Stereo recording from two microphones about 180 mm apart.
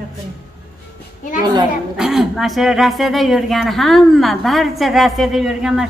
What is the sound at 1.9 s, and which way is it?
Speech, centre (ahead or behind).